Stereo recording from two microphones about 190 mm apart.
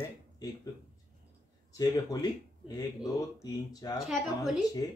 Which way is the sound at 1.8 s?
20° left (ahead or behind).